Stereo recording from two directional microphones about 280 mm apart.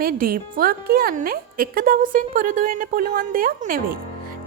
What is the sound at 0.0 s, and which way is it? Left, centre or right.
Speech, right.